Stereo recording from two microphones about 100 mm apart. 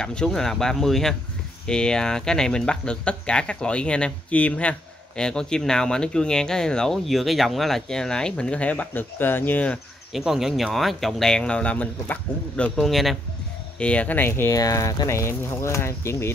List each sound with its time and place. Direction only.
0.0 s speech: 10° left (ahead or behind)
10.1 s speech: 5° right (ahead or behind)
13.7 s speech: 10° left (ahead or behind)
14.5 s speech: 35° left (ahead or behind)